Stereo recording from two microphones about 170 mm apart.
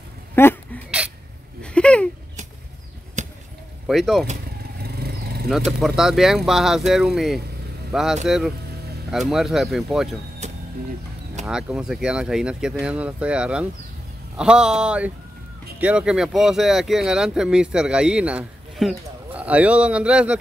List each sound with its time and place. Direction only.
0.4 s speech: 15° left (ahead or behind)
1.6 s a sound: 5° left (ahead or behind)
3.2 s basketball bounce: 45° right (ahead or behind)
3.8 s speech: centre (ahead or behind)
4.8 s vehicle: 70° right (ahead or behind)
5.7 s speech: centre (ahead or behind)
11.4 s speech: 5° right (ahead or behind)